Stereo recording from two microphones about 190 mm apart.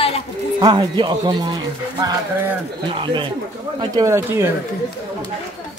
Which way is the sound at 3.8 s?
15° right (ahead or behind).